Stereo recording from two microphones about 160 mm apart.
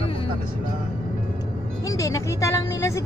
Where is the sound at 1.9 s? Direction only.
20° left (ahead or behind).